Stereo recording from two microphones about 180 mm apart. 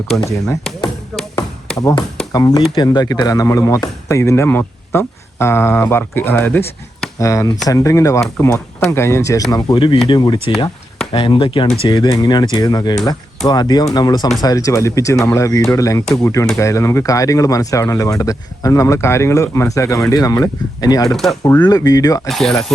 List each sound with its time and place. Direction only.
1.8 s speech: 20° left (ahead or behind)
21.1 s speech: centre (ahead or behind)
21.4 s speech: 20° left (ahead or behind)
22.3 s speech: centre (ahead or behind)